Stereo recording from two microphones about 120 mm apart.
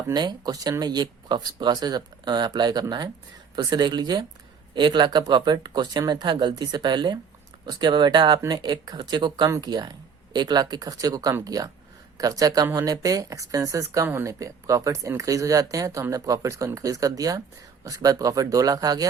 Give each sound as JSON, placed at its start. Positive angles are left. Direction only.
{"t": 0.1, "sound": "speech", "side_deg": -35}